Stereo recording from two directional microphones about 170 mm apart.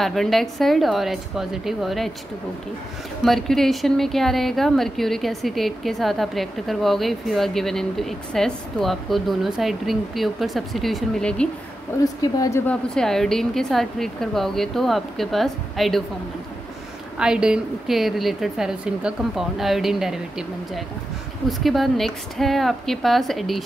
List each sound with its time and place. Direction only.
0.0 s a woman's voice: centre (ahead or behind)
3.3 s a woman's voice: centre (ahead or behind)
12.0 s a woman's voice: 20° left (ahead or behind)
12.9 s a woman's voice: 5° left (ahead or behind)
17.2 s a woman's voice: 5° right (ahead or behind)